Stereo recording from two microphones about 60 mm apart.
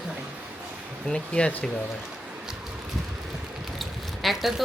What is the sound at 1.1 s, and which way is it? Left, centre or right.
Speech, centre.